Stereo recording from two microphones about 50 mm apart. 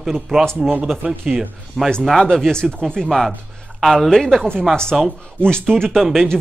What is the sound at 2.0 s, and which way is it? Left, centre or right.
Speech, centre.